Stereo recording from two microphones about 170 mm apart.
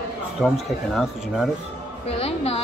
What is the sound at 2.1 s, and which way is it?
Speech, 35° left (ahead or behind).